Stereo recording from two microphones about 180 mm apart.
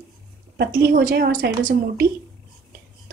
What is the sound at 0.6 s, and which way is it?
A woman's voice, 60° right (ahead or behind).